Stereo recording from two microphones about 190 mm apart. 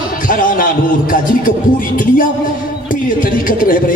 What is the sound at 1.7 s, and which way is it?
Speech, 45° left (ahead or behind).